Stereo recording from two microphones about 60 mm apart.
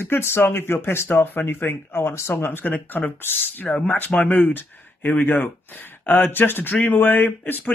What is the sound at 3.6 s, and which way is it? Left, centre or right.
Speech, left.